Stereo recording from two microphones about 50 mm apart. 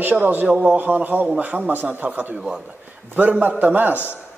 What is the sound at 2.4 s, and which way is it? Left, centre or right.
Speech, right.